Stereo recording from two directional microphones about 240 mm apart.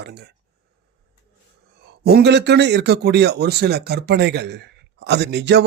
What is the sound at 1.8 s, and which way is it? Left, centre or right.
A man's voice, right.